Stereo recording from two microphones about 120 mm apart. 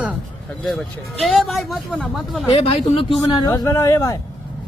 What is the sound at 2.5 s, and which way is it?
Speech, 50° left (ahead or behind).